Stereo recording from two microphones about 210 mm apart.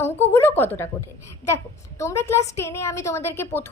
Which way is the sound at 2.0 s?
15° left (ahead or behind).